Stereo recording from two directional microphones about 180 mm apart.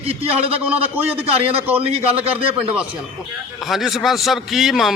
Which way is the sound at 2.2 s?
30° right (ahead or behind).